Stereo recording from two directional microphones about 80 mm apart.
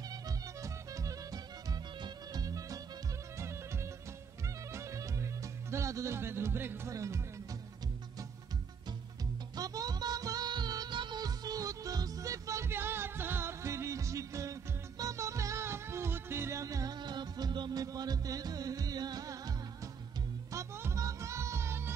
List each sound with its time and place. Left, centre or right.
0.1 s music: right
2.0 s music: right
2.4 s music: right
3.3 s music: right
6.9 s speech: right
9.6 s music: right
17.8 s music: right
20.5 s music: right